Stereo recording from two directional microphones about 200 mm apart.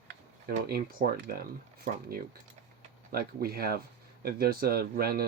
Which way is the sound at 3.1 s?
50° right (ahead or behind).